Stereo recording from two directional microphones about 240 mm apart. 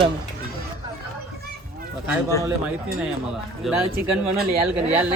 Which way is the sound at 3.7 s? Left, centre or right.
Centre.